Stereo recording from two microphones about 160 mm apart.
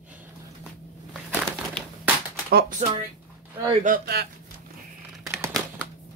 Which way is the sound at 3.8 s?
70° right (ahead or behind).